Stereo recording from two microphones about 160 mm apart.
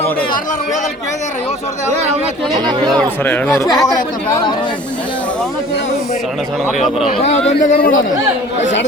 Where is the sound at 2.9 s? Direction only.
10° left (ahead or behind).